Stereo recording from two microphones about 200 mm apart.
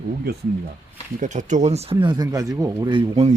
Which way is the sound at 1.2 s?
40° right (ahead or behind).